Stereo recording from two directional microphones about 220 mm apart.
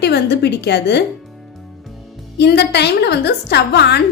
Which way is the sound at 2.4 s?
50° left (ahead or behind).